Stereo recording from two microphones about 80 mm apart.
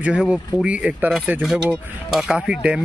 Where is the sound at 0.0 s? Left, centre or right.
Centre.